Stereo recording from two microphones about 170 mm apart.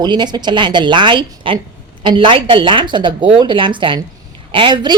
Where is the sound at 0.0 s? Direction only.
25° right (ahead or behind).